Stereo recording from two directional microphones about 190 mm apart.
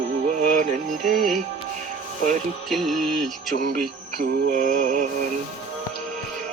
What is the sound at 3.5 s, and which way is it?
Music, 45° right (ahead or behind).